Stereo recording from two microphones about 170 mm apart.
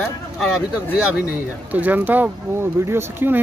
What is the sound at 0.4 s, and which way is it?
Speech, centre (ahead or behind).